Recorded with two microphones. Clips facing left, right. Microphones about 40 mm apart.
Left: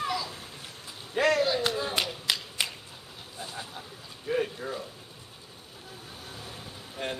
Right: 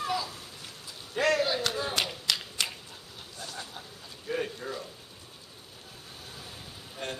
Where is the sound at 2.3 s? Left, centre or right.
Centre.